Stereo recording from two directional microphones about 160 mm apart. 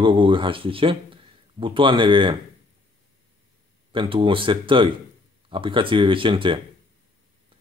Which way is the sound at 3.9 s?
30° right (ahead or behind).